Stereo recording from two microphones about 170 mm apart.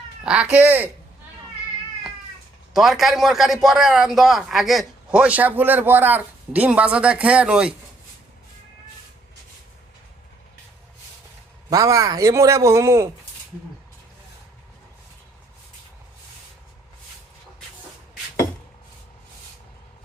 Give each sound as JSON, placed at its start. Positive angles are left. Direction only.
{"t": 0.3, "sound": "speech", "side_deg": -5}
{"t": 2.7, "sound": "a man's voice", "side_deg": 0}
{"t": 11.7, "sound": "speech", "side_deg": -20}